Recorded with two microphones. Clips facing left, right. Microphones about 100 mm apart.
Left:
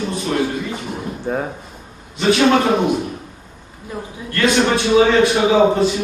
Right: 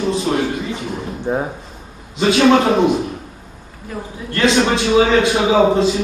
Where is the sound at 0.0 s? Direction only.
20° right (ahead or behind).